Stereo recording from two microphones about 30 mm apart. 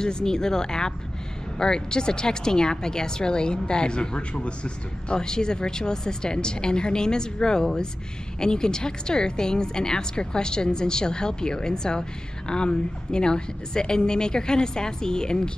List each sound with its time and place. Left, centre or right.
0.0 s a woman's voice: left
5.2 s a woman's voice: left